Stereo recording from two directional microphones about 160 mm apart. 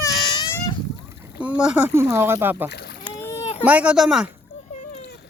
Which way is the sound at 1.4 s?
5° right (ahead or behind).